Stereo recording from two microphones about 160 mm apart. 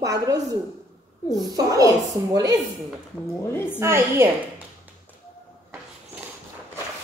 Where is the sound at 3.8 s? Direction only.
15° right (ahead or behind).